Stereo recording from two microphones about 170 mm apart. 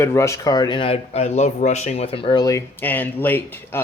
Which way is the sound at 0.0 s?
15° left (ahead or behind).